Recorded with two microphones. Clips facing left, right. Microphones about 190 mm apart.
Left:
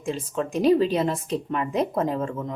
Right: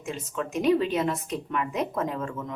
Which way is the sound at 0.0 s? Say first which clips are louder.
Left 5 dB; 30° left (ahead or behind).